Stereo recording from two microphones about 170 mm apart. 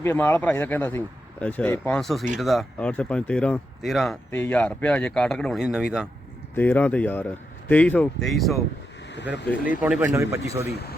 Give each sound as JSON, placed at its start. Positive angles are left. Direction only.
{"t": 0.0, "sound": "speech", "side_deg": 15}
{"t": 4.3, "sound": "speech", "side_deg": 10}
{"t": 6.6, "sound": "speech", "side_deg": 10}
{"t": 9.1, "sound": "speech", "side_deg": 90}
{"t": 9.8, "sound": "speech", "side_deg": -10}